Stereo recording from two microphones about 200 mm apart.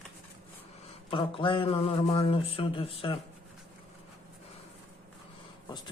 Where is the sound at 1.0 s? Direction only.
25° left (ahead or behind).